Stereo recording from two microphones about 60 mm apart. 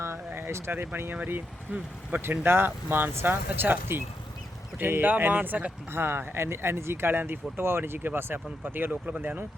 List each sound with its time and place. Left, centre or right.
0.3 s a sound: right
1.1 s speech: right
2.3 s speech: right